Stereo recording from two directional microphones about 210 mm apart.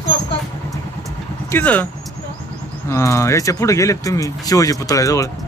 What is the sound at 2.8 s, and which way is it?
Speech, 15° left (ahead or behind).